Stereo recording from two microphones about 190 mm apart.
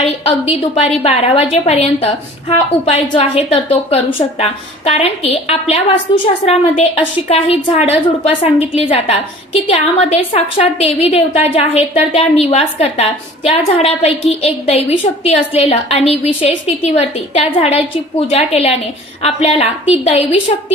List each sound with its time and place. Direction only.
0.0 s a woman's voice: 30° left (ahead or behind)